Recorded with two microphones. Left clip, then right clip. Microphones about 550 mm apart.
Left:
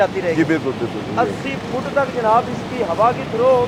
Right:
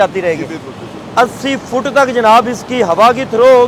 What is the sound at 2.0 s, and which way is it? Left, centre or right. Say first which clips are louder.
Speech: right 8 dB; right.